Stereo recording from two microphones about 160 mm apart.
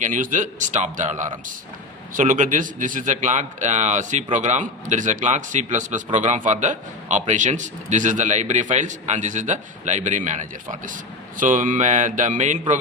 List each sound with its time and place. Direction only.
0.0 s a man's voice: 55° right (ahead or behind)